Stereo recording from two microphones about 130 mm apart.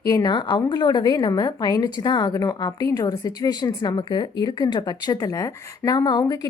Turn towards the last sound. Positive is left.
turn(degrees=30)  # may be behind; listen again after turning